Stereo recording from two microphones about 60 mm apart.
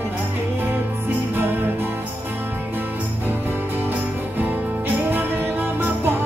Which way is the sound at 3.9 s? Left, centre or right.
Right.